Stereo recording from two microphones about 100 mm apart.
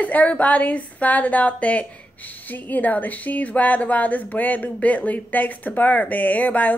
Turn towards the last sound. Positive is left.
turn(degrees=15)  # may be behind; listen again after turning